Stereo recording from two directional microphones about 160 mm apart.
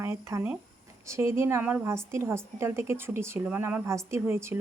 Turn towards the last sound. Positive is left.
turn(degrees=-15)  # may be behind; listen again after turning